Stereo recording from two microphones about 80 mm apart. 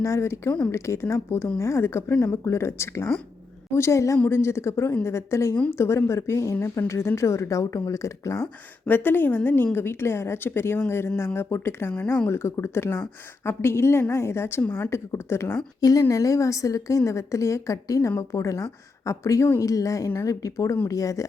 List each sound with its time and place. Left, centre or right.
0.0 s speech: left
8.9 s a woman's voice: left
15.8 s a woman's voice: left